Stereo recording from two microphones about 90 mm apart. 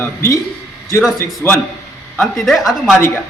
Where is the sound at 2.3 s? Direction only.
Centre (ahead or behind).